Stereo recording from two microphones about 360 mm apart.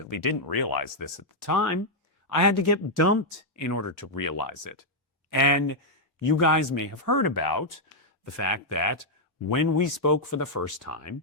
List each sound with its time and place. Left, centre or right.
0.1 s speech: left
8.2 s speech: left